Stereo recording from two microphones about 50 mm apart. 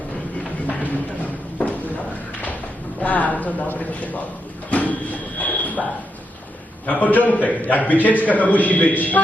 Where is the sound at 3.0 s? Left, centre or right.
Left.